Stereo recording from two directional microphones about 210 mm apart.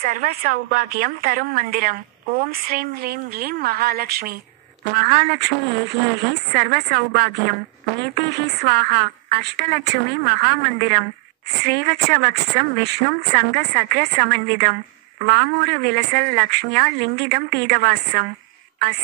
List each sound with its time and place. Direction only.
0.0 s a woman's voice: 45° right (ahead or behind)
6.5 s a woman's voice: 45° right (ahead or behind)